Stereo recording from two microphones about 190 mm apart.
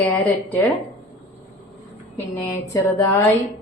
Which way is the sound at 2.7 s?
15° left (ahead or behind).